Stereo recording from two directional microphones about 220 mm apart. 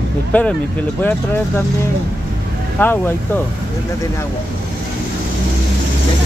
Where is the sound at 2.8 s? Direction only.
10° left (ahead or behind).